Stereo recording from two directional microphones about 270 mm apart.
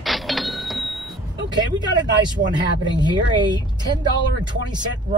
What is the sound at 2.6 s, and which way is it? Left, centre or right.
Speech, centre.